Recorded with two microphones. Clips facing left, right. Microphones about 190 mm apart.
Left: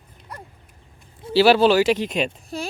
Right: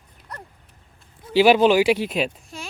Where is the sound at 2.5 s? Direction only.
35° left (ahead or behind).